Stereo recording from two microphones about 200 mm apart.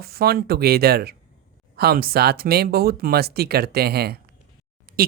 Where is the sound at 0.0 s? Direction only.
50° right (ahead or behind).